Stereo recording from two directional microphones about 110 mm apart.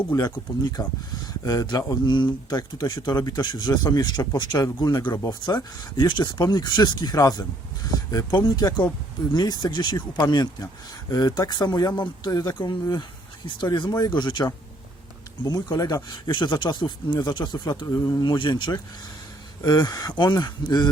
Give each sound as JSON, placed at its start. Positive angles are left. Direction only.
{"t": 0.8, "sound": "speech", "side_deg": 35}